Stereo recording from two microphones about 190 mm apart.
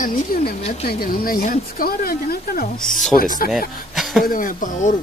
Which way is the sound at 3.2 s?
45° left (ahead or behind).